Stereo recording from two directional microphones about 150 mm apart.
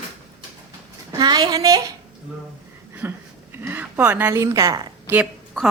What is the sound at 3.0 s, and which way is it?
A woman's voice, 15° right (ahead or behind).